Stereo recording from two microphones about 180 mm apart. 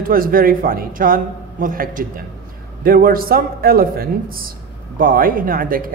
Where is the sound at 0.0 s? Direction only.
50° right (ahead or behind).